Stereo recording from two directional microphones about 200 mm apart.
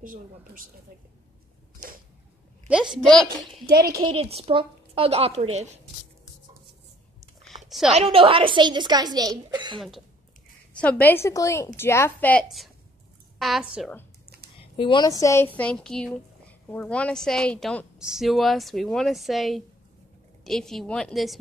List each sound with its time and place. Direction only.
0.0 s speech: 45° right (ahead or behind)
2.7 s a woman's voice: 5° right (ahead or behind)
3.6 s speech: 50° right (ahead or behind)
4.0 s a woman's voice: 30° right (ahead or behind)
7.9 s a woman's voice: 30° right (ahead or behind)
9.8 s a woman's voice: centre (ahead or behind)
14.6 s a woman's voice: 25° left (ahead or behind); by 21.4 s centre (ahead or behind)